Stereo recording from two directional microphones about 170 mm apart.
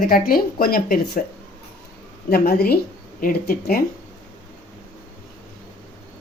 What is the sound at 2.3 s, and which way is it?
Speech, 65° left (ahead or behind).